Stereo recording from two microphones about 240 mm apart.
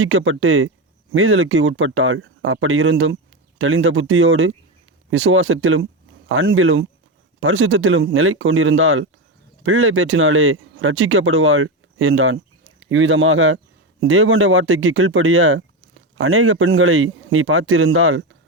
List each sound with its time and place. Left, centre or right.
0.0 s speech: right